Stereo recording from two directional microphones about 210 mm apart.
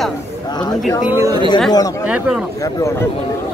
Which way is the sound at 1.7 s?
20° left (ahead or behind).